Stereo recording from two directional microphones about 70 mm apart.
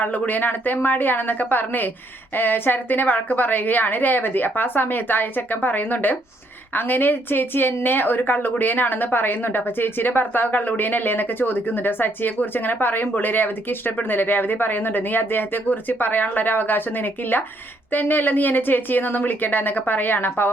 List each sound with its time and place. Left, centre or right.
0.0 s a woman's voice: left